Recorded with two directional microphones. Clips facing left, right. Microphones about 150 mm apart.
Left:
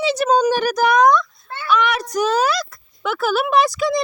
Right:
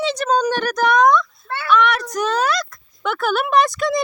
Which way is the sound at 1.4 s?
70° right (ahead or behind).